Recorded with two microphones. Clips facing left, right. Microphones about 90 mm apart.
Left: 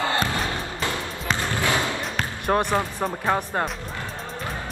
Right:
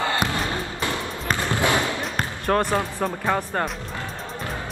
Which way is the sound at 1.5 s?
20° right (ahead or behind).